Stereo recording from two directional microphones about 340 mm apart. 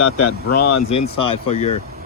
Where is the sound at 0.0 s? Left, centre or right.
Left.